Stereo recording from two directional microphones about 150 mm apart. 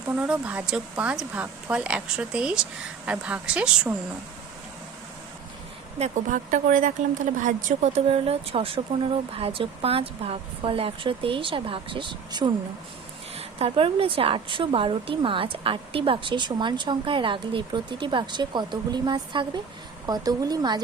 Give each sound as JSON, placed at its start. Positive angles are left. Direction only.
{"t": 0.2, "sound": "speech", "side_deg": -10}
{"t": 6.0, "sound": "a woman's voice", "side_deg": -55}